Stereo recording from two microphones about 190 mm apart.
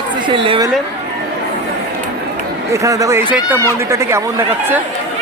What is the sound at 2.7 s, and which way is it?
Speech, 15° right (ahead or behind).